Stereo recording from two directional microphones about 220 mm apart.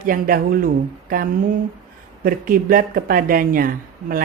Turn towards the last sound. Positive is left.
turn(degrees=-40)  # may be behind; listen again after turning